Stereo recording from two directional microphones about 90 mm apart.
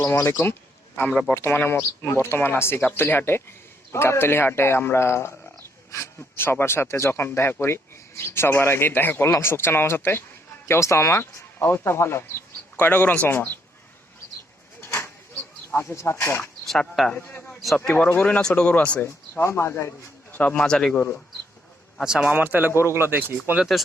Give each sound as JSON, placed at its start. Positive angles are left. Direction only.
{"t": 0.1, "sound": "speech", "side_deg": 25}
{"t": 14.8, "sound": "a sound", "side_deg": 25}
{"t": 15.7, "sound": "speech", "side_deg": 25}
{"t": 16.6, "sound": "speech", "side_deg": 5}
{"t": 17.2, "sound": "a sound", "side_deg": 20}
{"t": 17.9, "sound": "speech", "side_deg": 20}
{"t": 19.0, "sound": "speech", "side_deg": 30}
{"t": 20.3, "sound": "speech", "side_deg": 15}
{"t": 22.0, "sound": "speech", "side_deg": -5}
{"t": 22.3, "sound": "speech", "side_deg": -20}